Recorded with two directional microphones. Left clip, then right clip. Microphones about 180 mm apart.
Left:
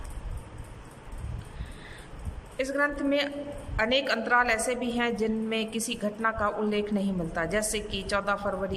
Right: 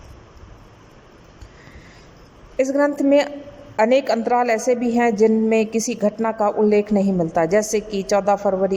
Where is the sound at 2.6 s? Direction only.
35° right (ahead or behind).